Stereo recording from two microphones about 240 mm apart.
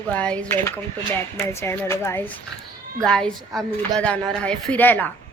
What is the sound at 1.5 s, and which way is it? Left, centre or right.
A woman's voice, centre.